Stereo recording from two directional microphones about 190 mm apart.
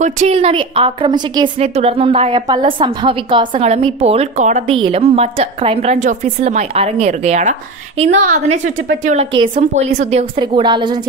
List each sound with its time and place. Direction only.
0.0 s a woman's voice: 35° right (ahead or behind)
10.4 s a woman's voice: 25° right (ahead or behind)